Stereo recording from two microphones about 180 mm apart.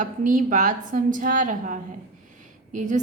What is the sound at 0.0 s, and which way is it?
A woman's voice, 45° right (ahead or behind).